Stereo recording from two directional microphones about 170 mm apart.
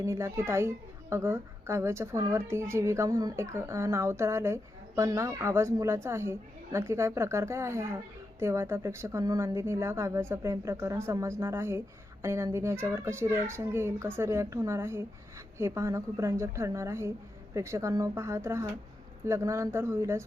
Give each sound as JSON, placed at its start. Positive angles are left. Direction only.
{"t": 0.0, "sound": "a woman's voice", "side_deg": -15}